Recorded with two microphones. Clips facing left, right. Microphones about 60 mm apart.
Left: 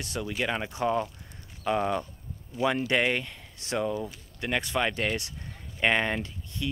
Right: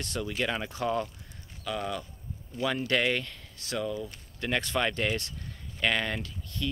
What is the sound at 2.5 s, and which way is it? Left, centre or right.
Speech, centre.